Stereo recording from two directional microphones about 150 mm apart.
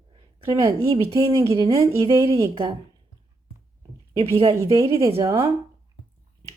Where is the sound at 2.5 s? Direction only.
35° right (ahead or behind).